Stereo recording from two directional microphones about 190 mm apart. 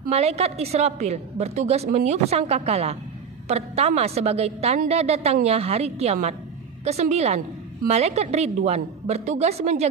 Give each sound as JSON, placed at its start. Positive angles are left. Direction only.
{"t": 0.0, "sound": "a woman's voice", "side_deg": -35}